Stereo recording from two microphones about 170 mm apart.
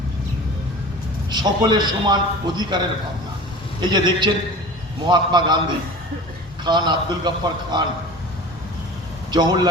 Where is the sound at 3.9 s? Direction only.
25° right (ahead or behind).